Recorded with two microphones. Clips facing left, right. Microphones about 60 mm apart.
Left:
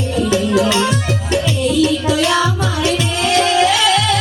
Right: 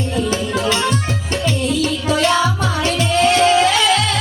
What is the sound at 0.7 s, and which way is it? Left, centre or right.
Music, right.